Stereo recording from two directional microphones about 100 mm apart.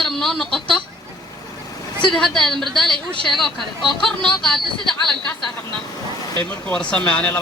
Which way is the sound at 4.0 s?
5° left (ahead or behind).